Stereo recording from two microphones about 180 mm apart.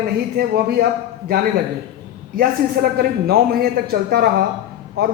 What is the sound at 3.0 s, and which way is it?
Speech, 55° right (ahead or behind).